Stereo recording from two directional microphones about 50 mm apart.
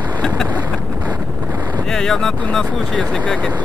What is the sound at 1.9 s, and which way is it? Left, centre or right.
Speech, centre.